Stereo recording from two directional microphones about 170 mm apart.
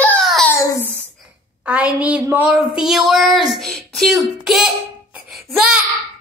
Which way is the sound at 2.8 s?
Centre (ahead or behind).